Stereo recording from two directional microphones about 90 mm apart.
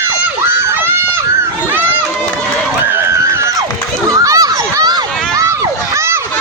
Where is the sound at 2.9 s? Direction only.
30° right (ahead or behind).